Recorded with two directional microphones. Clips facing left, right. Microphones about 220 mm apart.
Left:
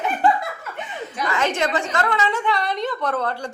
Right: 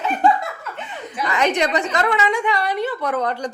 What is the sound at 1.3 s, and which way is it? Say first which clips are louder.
A woman's voice: right 3 dB; 20° right (ahead or behind).